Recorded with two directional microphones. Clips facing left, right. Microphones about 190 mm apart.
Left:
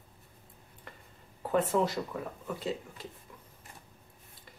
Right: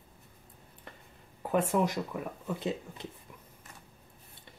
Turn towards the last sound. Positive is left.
turn(degrees=-20)  # may be behind; listen again after turning